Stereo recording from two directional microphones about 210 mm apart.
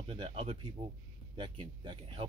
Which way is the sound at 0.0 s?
30° right (ahead or behind).